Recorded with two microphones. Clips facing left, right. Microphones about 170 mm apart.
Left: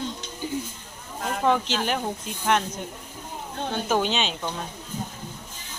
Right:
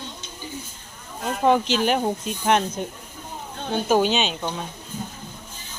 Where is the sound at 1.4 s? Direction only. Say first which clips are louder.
Right 4 dB; 20° right (ahead or behind).